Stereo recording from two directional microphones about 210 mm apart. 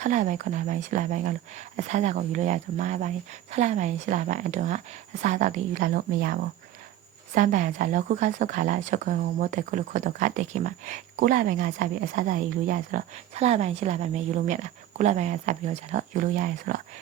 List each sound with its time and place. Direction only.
0.0 s a woman's voice: 35° right (ahead or behind)